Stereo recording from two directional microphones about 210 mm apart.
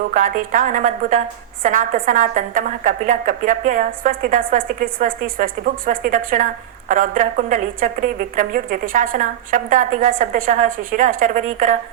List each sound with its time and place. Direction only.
0.1 s a woman's voice: 40° right (ahead or behind)